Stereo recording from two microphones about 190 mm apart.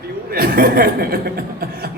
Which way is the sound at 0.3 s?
50° right (ahead or behind).